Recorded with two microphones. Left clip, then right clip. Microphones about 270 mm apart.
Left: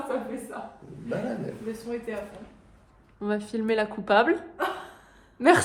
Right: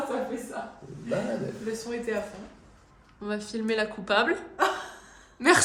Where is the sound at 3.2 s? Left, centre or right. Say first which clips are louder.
Left 3 dB; left.